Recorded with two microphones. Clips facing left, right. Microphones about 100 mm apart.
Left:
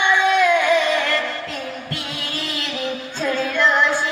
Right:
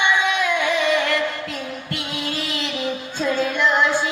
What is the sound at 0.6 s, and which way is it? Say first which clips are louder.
Music: left 2 dB; 10° right (ahead or behind).